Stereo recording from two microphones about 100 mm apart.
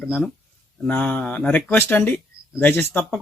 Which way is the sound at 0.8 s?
15° left (ahead or behind).